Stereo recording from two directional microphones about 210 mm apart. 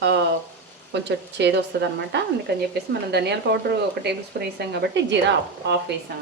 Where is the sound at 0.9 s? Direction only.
55° right (ahead or behind).